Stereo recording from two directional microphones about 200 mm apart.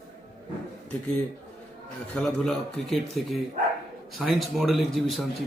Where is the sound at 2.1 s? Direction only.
5° left (ahead or behind).